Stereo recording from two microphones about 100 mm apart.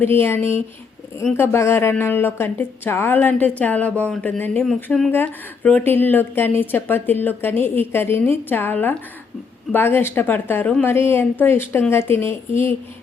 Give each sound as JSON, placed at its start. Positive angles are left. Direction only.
{"t": 0.0, "sound": "a woman's voice", "side_deg": 25}
{"t": 4.9, "sound": "speech", "side_deg": 5}
{"t": 5.1, "sound": "a woman's voice", "side_deg": 15}